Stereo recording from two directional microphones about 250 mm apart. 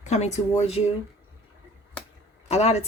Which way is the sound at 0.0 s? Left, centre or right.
Left.